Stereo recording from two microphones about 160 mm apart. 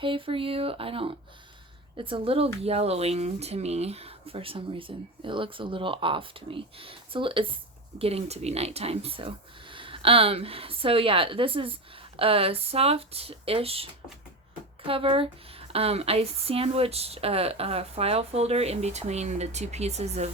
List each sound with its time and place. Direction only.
0.0 s speech: 35° right (ahead or behind)
14.8 s speech: 35° right (ahead or behind)